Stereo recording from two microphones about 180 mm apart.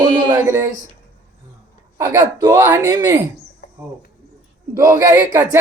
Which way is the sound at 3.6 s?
60° left (ahead or behind).